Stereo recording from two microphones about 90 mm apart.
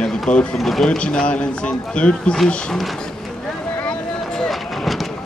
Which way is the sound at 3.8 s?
10° left (ahead or behind).